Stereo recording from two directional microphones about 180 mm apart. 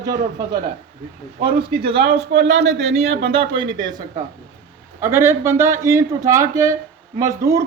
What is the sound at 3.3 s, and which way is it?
Speech, 30° right (ahead or behind).